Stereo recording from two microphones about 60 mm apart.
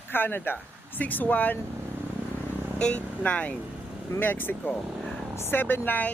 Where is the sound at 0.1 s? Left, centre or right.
Left.